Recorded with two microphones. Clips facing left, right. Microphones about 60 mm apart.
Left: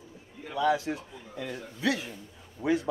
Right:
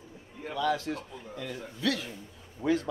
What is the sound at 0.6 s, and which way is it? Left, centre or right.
A man's voice, centre.